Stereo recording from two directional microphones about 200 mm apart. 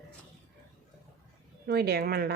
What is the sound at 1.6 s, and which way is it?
Speech, 55° right (ahead or behind).